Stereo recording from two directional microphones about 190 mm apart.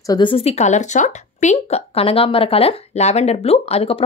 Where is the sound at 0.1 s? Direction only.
25° left (ahead or behind).